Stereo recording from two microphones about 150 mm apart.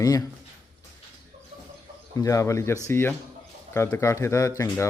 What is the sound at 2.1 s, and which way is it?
Speech, 20° left (ahead or behind).